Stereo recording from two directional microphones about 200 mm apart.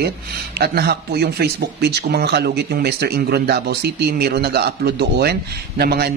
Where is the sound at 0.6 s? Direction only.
55° right (ahead or behind).